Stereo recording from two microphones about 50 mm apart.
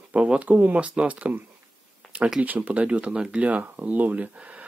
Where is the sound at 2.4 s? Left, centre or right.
Right.